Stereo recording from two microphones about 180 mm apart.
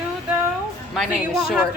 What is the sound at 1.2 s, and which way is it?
Speech, 5° right (ahead or behind).